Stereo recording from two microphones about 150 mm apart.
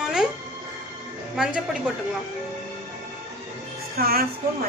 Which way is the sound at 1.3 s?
5° right (ahead or behind).